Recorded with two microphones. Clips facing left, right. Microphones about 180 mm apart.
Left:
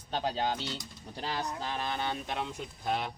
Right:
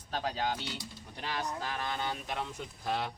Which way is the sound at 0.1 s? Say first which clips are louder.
Left 2 dB; 25° left (ahead or behind).